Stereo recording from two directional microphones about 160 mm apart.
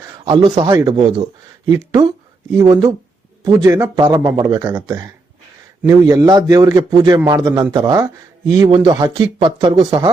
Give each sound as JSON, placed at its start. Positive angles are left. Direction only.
{"t": 0.3, "sound": "speech", "side_deg": -25}